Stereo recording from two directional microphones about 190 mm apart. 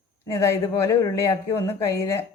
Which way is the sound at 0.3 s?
15° left (ahead or behind).